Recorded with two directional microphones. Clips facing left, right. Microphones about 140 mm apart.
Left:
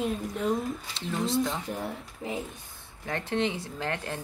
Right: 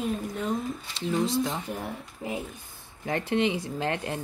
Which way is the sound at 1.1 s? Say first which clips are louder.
Right 2 dB; 5° right (ahead or behind).